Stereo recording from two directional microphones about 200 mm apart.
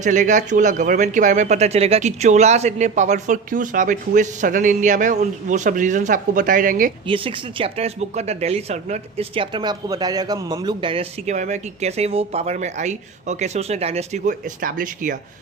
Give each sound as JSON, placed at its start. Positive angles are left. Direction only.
{"t": 0.0, "sound": "speech", "side_deg": -40}
{"t": 7.1, "sound": "speech", "side_deg": -25}